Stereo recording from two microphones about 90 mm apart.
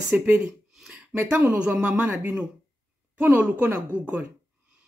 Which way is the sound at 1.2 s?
15° right (ahead or behind).